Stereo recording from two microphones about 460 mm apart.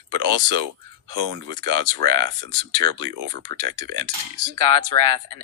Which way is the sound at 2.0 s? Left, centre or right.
Right.